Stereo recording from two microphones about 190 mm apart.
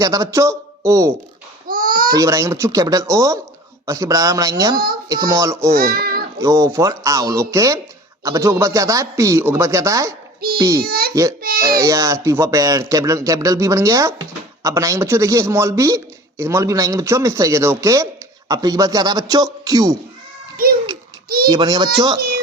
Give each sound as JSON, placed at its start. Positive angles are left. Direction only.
{"t": 0.0, "sound": "a man's voice", "side_deg": -20}
{"t": 1.6, "sound": "babbling", "side_deg": -45}
{"t": 2.1, "sound": "a man's voice", "side_deg": -15}
{"t": 5.7, "sound": "a child's voice", "side_deg": -50}
{"t": 6.4, "sound": "a man's voice", "side_deg": -15}
{"t": 10.8, "sound": "speech", "side_deg": -50}
{"t": 11.1, "sound": "a man's voice", "side_deg": -15}
{"t": 21.2, "sound": "a child's voice", "side_deg": -50}
{"t": 21.5, "sound": "a child's voice", "side_deg": -25}